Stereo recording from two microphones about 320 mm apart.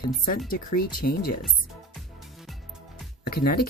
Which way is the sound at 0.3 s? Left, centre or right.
Left.